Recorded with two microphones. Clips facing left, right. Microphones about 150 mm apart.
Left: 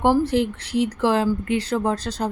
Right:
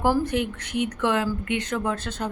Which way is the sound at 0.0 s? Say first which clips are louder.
Left 4 dB; 25° left (ahead or behind).